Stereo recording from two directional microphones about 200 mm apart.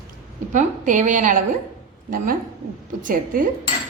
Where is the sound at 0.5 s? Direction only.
40° right (ahead or behind).